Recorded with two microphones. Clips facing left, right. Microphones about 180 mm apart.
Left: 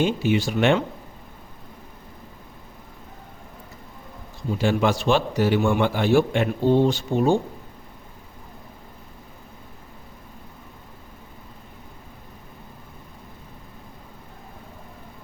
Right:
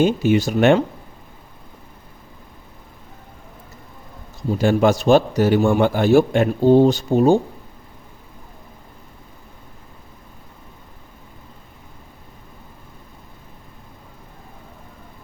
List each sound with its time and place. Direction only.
0.0 s a man's voice: 45° right (ahead or behind)
4.5 s a man's voice: 45° right (ahead or behind)